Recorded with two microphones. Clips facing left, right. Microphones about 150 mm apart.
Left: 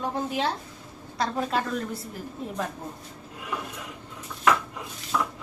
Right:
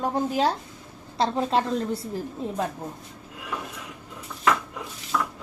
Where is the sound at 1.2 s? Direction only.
25° right (ahead or behind).